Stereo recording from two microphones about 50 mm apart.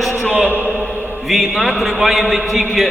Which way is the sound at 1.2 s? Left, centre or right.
Centre.